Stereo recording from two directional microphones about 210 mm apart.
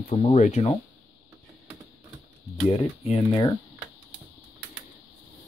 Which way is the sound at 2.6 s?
30° left (ahead or behind).